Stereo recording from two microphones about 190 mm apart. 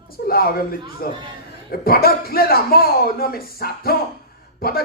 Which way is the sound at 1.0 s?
50° left (ahead or behind).